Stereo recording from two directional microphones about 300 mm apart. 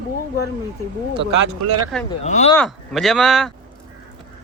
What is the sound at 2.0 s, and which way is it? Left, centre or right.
Speech, left.